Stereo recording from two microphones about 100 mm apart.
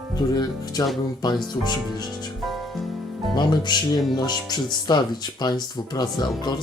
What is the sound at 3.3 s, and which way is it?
Speech, 45° left (ahead or behind).